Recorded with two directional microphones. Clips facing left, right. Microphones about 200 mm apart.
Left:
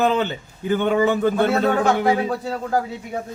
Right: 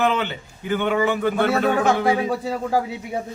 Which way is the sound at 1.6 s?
15° right (ahead or behind).